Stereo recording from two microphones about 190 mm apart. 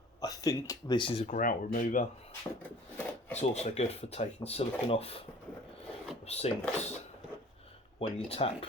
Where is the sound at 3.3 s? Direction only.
35° left (ahead or behind).